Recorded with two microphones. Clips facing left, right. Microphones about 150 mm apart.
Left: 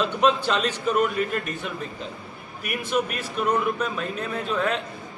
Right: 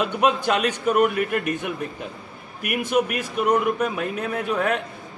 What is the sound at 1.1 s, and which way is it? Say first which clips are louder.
Speech: right 2 dB; 65° right (ahead or behind).